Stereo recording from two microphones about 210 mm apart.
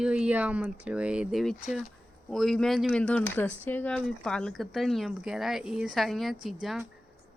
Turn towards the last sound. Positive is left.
turn(degrees=0)  # may be behind; listen again after turning